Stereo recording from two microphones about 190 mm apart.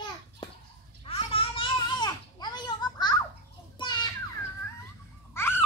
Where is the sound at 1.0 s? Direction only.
30° left (ahead or behind).